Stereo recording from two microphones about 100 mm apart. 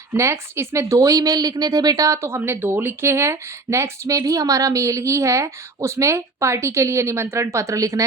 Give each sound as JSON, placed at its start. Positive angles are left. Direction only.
{"t": 0.1, "sound": "a woman's voice", "side_deg": -25}